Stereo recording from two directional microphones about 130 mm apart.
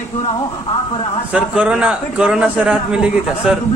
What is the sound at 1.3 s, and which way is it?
A man's voice, 10° right (ahead or behind).